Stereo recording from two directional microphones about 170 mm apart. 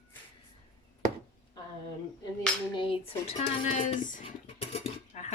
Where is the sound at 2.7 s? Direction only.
35° left (ahead or behind); by 4.2 s 50° left (ahead or behind).